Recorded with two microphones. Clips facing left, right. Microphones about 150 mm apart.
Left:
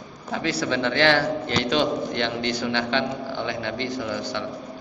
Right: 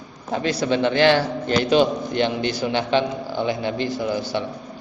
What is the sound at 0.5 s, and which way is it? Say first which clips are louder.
A man's voice: right 4 dB; 20° right (ahead or behind).